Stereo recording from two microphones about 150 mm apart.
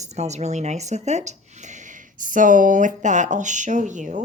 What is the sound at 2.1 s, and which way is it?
Speech, 60° right (ahead or behind).